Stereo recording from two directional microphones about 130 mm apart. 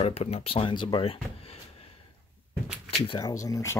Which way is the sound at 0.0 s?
55° left (ahead or behind).